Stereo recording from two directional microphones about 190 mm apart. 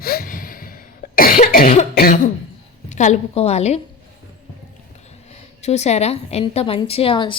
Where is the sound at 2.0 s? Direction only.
45° left (ahead or behind).